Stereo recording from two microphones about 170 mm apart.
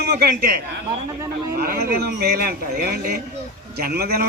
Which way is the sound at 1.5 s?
65° right (ahead or behind).